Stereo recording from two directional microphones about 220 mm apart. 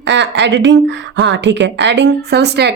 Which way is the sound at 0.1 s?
55° right (ahead or behind).